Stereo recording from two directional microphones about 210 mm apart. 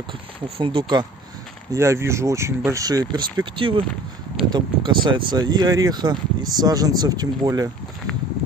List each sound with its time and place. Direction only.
0.6 s speech: 25° right (ahead or behind)